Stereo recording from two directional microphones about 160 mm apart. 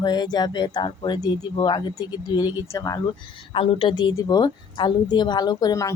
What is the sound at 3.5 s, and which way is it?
Speech, 35° left (ahead or behind).